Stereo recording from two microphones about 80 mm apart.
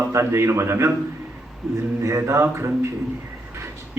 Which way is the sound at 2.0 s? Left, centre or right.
Right.